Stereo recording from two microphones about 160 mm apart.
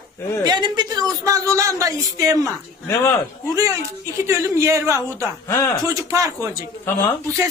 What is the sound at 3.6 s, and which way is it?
A woman's voice, 20° right (ahead or behind).